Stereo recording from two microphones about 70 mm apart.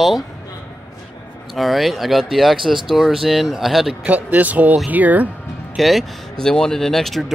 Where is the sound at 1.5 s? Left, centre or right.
Centre.